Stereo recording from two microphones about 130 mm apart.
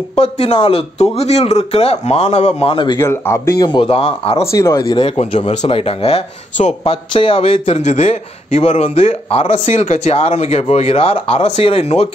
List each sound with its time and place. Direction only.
0.1 s speech: 50° left (ahead or behind)
3.0 s speech: 20° left (ahead or behind)
3.5 s speech: 35° left (ahead or behind)
4.5 s speech: 25° left (ahead or behind)
4.9 s speech: 50° left (ahead or behind)